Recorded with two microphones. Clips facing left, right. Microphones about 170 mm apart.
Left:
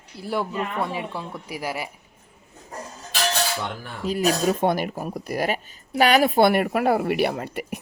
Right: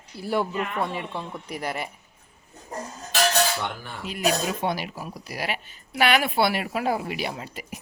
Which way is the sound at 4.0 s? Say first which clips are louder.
Left 4 dB; 40° left (ahead or behind).